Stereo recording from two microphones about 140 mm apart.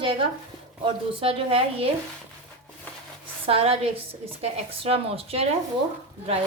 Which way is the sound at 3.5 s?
45° right (ahead or behind).